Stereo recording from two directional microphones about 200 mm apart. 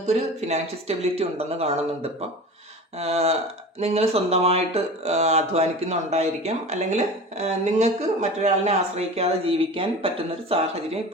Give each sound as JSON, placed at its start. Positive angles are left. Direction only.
{"t": 0.0, "sound": "speech", "side_deg": -35}